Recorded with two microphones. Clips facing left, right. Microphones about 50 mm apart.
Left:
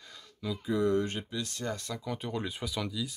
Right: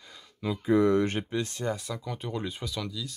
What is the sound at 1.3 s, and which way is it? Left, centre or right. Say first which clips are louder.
Speech: right 6 dB; right.